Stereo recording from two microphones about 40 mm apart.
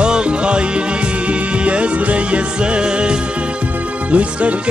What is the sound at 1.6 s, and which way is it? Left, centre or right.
Music, right.